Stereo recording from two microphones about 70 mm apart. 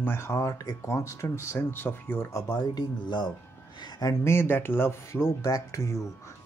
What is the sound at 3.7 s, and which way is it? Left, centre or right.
Speech, left.